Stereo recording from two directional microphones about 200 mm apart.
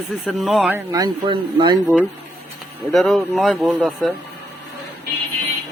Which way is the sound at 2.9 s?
Centre (ahead or behind).